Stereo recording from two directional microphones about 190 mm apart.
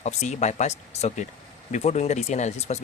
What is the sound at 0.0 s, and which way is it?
Speech, 35° left (ahead or behind).